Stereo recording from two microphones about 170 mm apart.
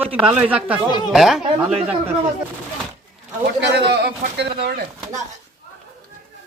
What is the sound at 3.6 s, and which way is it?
A man's voice, 85° right.